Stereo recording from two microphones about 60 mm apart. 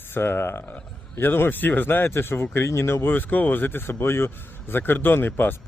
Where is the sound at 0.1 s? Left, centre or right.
Left.